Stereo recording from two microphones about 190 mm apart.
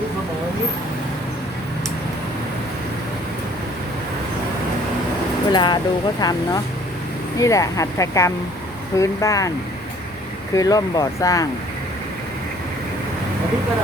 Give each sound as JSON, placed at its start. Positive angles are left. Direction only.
{"t": 5.5, "sound": "speech", "side_deg": 25}
{"t": 10.5, "sound": "speech", "side_deg": 20}